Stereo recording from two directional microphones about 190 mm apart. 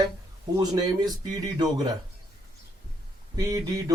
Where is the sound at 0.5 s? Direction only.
20° right (ahead or behind).